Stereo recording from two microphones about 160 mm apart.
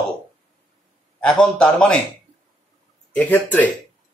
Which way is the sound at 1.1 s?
5° left (ahead or behind).